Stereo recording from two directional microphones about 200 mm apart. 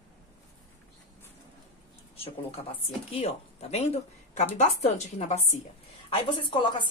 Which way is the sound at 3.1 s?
30° left (ahead or behind).